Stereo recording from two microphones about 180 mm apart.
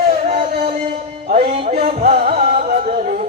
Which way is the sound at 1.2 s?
35° right (ahead or behind).